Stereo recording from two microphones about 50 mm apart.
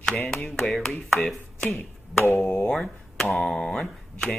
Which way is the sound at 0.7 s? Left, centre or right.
Centre.